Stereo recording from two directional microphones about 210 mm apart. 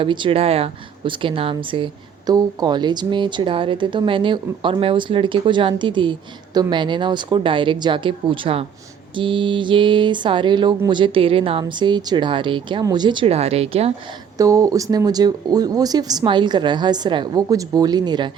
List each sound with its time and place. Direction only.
0.0 s a woman's voice: 25° right (ahead or behind)
14.3 s a woman's voice: 15° right (ahead or behind)